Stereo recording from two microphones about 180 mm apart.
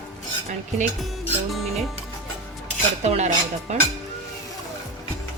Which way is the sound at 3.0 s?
40° right (ahead or behind).